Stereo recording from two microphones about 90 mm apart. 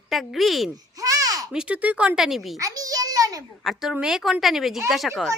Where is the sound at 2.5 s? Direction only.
40° right (ahead or behind).